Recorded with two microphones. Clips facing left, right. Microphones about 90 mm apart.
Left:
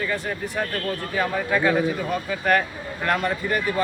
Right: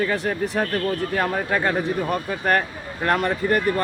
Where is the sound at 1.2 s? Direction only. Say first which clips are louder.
Left 3 dB; 40° right (ahead or behind).